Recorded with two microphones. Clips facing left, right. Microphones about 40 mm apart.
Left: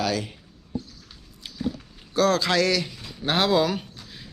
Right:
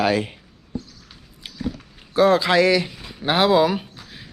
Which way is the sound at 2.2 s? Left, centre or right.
Right.